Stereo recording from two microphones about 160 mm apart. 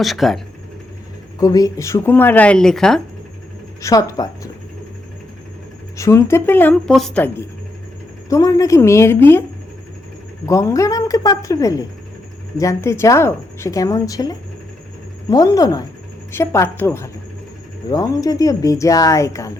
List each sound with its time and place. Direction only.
0.0 s speech: centre (ahead or behind)
1.4 s speech: 20° left (ahead or behind); by 3.0 s 5° left (ahead or behind)
3.8 s a woman's voice: 20° left (ahead or behind)
6.0 s speech: 15° left (ahead or behind)
8.3 s speech: 20° left (ahead or behind)
10.4 s a woman's voice: 20° left (ahead or behind)